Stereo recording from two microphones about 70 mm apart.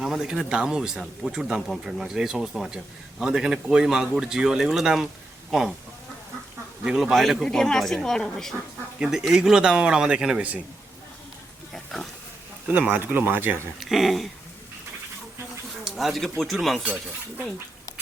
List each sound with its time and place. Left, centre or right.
0.0 s a man's voice: centre
6.8 s speech: centre
9.0 s a man's voice: centre
11.7 s pig: centre
12.9 s speech: right
13.7 s speech: centre
15.8 s a sound: centre
16.4 s speech: centre
16.8 s speech: centre